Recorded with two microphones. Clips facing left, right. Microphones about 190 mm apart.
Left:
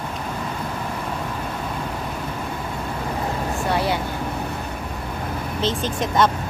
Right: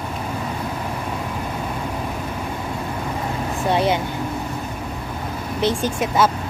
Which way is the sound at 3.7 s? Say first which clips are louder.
Right 4 dB; 20° right (ahead or behind).